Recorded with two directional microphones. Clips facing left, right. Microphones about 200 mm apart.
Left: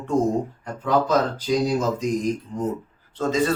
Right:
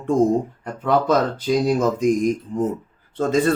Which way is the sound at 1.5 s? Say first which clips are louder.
Right 2 dB; 55° right (ahead or behind).